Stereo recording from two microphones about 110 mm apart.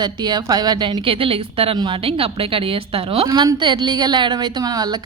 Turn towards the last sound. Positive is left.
turn(degrees=-35)  # may be behind; listen again after turning